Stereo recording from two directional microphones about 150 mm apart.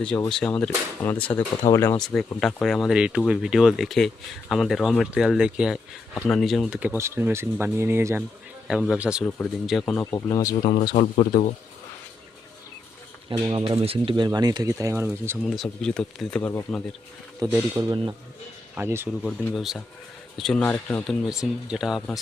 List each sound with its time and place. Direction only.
0.3 s speech: 5° left (ahead or behind)
2.0 s speech: 5° left (ahead or behind)
6.1 s speech: 5° left (ahead or behind); by 8.2 s 15° right (ahead or behind)
8.6 s speech: 5° right (ahead or behind)
9.9 s speech: 20° left (ahead or behind)
10.6 s speech: 50° left (ahead or behind)
13.3 s speech: 35° right (ahead or behind); by 15.4 s 15° right (ahead or behind)
15.4 s speech: centre (ahead or behind)
17.4 s speech: 25° right (ahead or behind)
18.7 s speech: 15° right (ahead or behind)
19.2 s speech: centre (ahead or behind)